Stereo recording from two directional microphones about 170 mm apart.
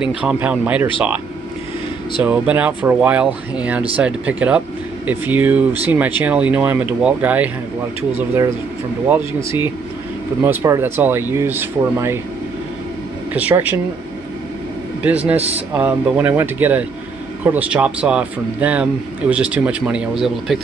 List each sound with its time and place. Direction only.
0.0 s speech: 5° right (ahead or behind)
2.2 s speech: 10° right (ahead or behind)
9.1 s speech: 15° right (ahead or behind)
13.3 s speech: 10° right (ahead or behind)
15.0 s speech: 10° right (ahead or behind)